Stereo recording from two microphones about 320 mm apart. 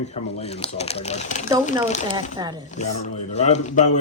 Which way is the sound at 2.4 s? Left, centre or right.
Centre.